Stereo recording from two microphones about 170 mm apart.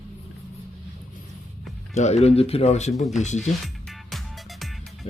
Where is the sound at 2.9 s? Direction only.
Centre (ahead or behind).